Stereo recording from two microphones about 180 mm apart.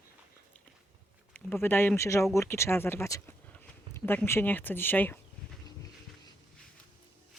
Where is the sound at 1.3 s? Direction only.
10° left (ahead or behind).